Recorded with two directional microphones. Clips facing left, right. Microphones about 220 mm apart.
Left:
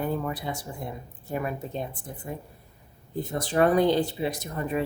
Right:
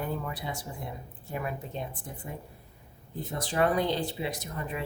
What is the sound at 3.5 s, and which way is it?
Speech, 45° left (ahead or behind).